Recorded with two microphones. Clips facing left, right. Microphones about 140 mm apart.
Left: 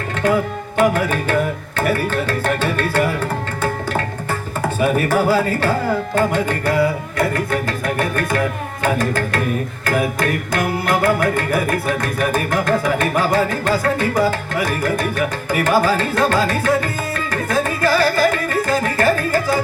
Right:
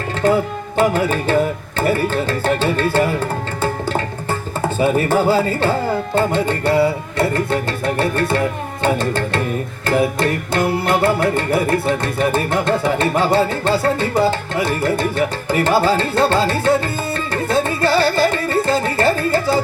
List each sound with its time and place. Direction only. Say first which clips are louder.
0.2 s music: right 2 dB; 30° right (ahead or behind)
1.8 s tabla: right 2 dB; 30° right (ahead or behind)
4.8 s music: right 1 dB; 25° right (ahead or behind)